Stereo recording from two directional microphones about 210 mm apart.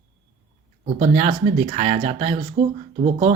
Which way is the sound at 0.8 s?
30° right (ahead or behind).